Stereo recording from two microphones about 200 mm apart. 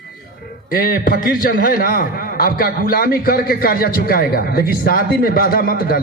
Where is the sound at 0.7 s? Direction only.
50° left (ahead or behind).